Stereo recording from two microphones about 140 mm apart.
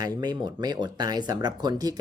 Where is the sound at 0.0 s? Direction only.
30° right (ahead or behind).